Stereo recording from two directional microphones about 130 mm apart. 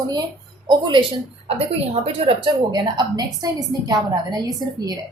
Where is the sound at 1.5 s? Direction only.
50° right (ahead or behind); by 5.0 s 30° right (ahead or behind).